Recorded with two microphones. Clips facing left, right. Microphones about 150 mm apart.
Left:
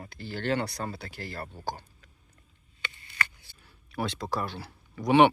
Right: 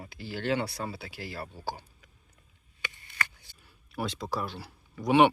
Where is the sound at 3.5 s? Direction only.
20° right (ahead or behind).